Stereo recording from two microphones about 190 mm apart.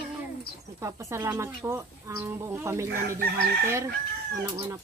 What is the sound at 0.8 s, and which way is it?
A woman's voice, 15° right (ahead or behind).